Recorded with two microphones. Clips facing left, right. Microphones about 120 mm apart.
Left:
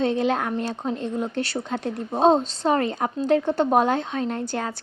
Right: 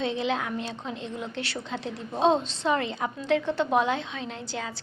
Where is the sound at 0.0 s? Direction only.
45° left (ahead or behind).